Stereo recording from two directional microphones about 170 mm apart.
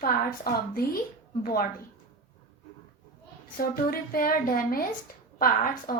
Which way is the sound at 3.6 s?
60° left (ahead or behind).